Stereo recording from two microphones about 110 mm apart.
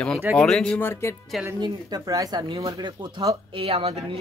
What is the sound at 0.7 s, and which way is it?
Speech, 20° left (ahead or behind).